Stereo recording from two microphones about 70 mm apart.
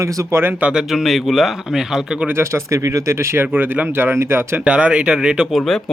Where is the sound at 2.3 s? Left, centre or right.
Right.